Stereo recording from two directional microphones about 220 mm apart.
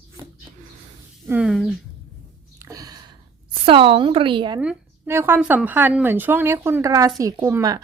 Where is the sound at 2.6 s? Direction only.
15° right (ahead or behind).